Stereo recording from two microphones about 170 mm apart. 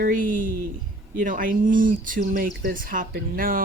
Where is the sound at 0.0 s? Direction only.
55° right (ahead or behind).